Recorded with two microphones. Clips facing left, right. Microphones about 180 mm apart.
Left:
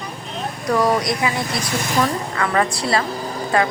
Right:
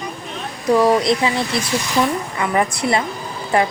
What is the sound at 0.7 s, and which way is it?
Speech, 25° right (ahead or behind).